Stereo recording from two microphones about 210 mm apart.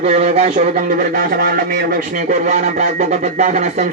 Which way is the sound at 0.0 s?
35° right (ahead or behind).